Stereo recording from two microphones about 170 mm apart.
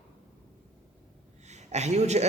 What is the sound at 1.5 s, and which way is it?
Speech, 40° right (ahead or behind).